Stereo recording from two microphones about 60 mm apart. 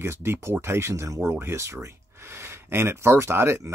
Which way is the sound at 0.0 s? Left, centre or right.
Right.